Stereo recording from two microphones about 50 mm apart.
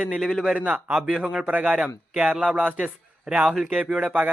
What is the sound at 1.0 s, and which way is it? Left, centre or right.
Speech, centre.